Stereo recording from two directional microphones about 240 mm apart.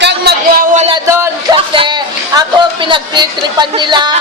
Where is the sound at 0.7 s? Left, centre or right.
Right.